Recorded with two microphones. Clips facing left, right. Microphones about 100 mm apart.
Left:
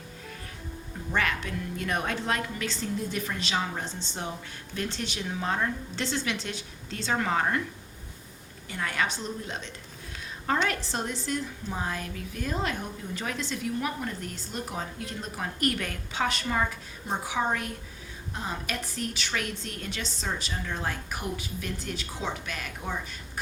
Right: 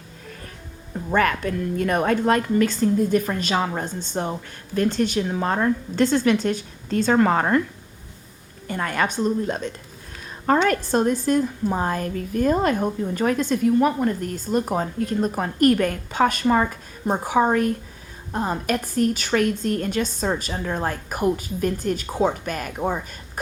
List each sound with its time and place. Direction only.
1.1 s a woman's voice: 50° right (ahead or behind)
8.6 s a woman's voice: 45° right (ahead or behind)